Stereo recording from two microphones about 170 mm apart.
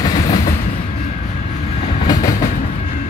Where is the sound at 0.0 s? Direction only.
25° left (ahead or behind).